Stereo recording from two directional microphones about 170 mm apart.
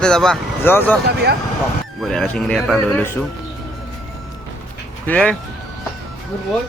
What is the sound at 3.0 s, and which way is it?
Speech, 15° left (ahead or behind).